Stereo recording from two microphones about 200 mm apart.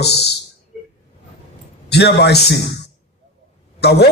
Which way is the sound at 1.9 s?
55° left (ahead or behind).